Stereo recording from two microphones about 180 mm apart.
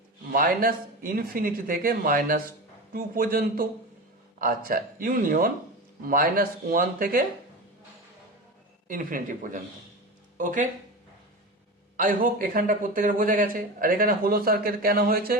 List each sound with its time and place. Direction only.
0.3 s speech: 50° right (ahead or behind)
8.9 s speech: 50° right (ahead or behind)
11.9 s speech: 50° right (ahead or behind)